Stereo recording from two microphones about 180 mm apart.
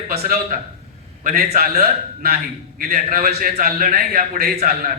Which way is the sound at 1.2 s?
45° right (ahead or behind).